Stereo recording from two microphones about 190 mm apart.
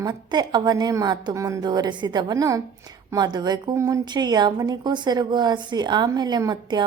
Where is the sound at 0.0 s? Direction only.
20° right (ahead or behind).